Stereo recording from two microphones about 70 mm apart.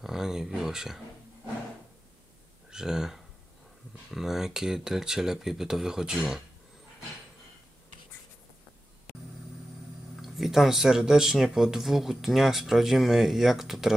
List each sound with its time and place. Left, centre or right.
0.0 s a sound: centre
2.7 s speech: centre
10.2 s speech: centre